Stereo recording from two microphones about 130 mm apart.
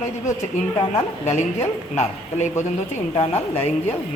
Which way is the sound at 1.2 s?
55° left (ahead or behind).